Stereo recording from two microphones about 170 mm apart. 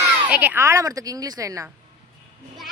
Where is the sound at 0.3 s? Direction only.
10° right (ahead or behind).